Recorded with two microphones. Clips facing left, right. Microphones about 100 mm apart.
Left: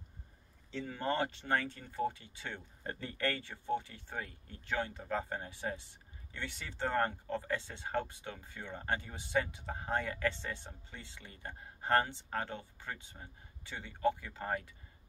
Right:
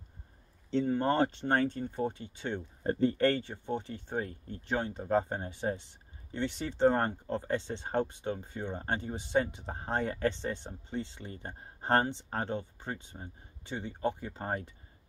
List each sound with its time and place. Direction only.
0.7 s speech: 35° right (ahead or behind)